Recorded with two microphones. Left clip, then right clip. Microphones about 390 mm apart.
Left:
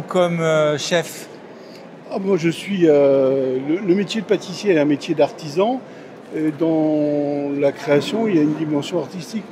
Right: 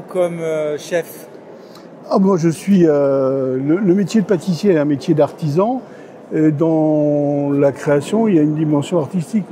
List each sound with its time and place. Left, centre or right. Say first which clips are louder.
0.1 s speech: left 1 dB; left
2.0 s speech: right 4 dB; right